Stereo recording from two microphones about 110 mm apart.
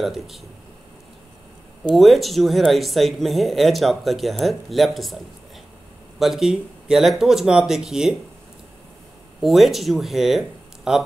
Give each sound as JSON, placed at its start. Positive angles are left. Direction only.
{"t": 0.0, "sound": "speech", "side_deg": 0}
{"t": 2.0, "sound": "speech", "side_deg": 0}
{"t": 9.4, "sound": "speech", "side_deg": 0}